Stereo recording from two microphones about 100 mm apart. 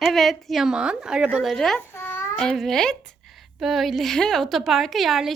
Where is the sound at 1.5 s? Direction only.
5° left (ahead or behind).